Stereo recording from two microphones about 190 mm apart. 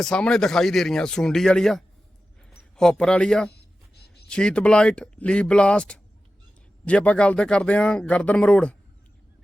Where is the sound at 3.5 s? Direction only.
60° left (ahead or behind).